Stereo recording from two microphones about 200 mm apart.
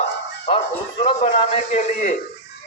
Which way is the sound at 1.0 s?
30° left (ahead or behind).